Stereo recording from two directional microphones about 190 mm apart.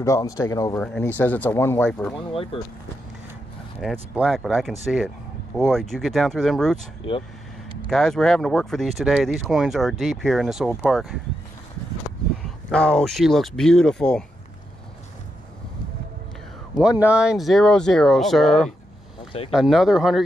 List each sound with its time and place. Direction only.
0.0 s speech: 15° left (ahead or behind)
0.7 s speech: 5° left (ahead or behind)
3.8 s speech: 5° right (ahead or behind)
7.9 s speech: 5° left (ahead or behind)
12.7 s speech: 5° left (ahead or behind)
16.7 s speech: 5° right (ahead or behind)